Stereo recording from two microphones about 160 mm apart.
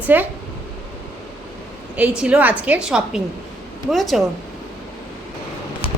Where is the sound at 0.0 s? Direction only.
10° right (ahead or behind).